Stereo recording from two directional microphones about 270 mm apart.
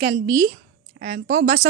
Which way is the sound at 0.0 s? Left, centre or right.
Right.